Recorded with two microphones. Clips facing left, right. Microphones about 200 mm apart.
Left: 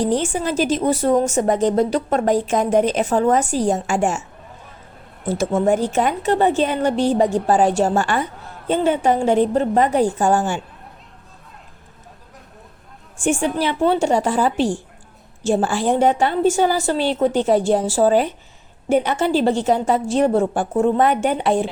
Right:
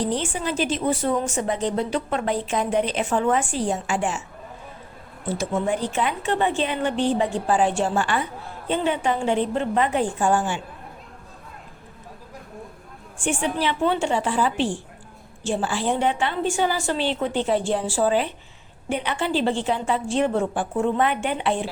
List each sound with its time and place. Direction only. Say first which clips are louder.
0.0 s a woman's voice: left 5 dB; 45° left (ahead or behind)
5.4 s a woman's voice: left 7 dB; 45° left (ahead or behind)
13.1 s a woman's voice: left 5 dB; 45° left (ahead or behind)